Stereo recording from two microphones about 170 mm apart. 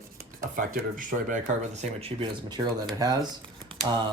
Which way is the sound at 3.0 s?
20° right (ahead or behind).